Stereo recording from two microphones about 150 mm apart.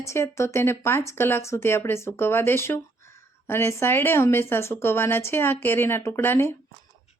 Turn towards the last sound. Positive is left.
turn(degrees=15)  # may be behind; listen again after turning